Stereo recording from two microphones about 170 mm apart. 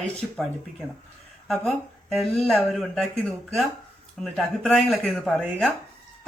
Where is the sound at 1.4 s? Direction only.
Centre (ahead or behind).